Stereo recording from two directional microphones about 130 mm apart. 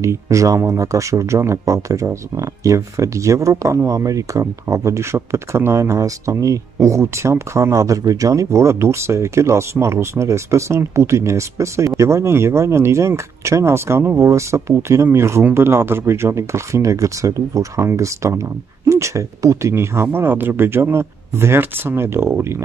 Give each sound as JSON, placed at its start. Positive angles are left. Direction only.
{"t": 0.0, "sound": "speech", "side_deg": -25}